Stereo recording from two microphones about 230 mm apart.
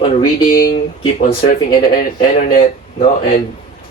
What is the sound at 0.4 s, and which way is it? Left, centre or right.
Speech, left.